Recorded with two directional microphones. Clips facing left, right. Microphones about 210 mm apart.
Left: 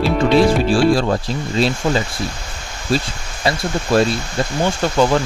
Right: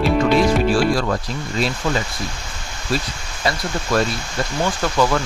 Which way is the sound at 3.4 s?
30° left (ahead or behind).